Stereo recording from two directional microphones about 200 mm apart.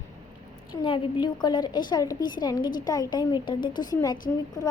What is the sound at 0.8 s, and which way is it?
A woman's voice, 25° left (ahead or behind).